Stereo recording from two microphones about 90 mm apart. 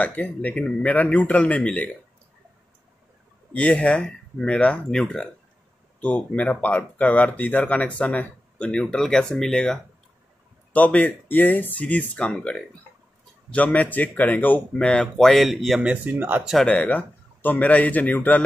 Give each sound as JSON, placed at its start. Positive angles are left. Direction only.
{"t": 0.0, "sound": "speech", "side_deg": 15}
{"t": 3.5, "sound": "speech", "side_deg": 15}
{"t": 15.8, "sound": "speech", "side_deg": -15}
{"t": 16.6, "sound": "speech", "side_deg": 15}